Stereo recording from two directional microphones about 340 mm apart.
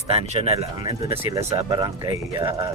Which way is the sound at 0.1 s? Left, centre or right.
Centre.